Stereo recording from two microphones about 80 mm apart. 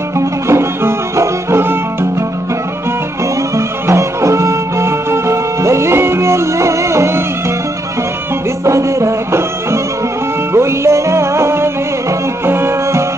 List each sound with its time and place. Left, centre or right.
0.2 s music: right
3.5 s music: right
8.6 s music: right